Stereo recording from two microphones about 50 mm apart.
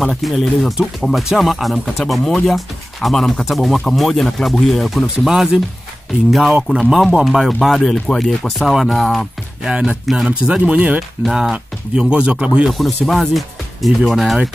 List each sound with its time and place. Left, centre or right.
0.0 s speech: centre
6.4 s speech: centre
6.8 s speech: centre
7.6 s speech: centre
9.7 s speech: centre
10.6 s speech: right
12.7 s speech: centre